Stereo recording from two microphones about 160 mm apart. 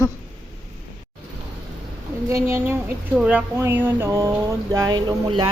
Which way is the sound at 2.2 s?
15° right (ahead or behind).